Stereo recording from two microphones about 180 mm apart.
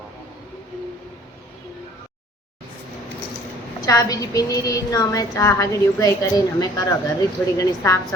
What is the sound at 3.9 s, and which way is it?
A woman's voice, 20° left (ahead or behind).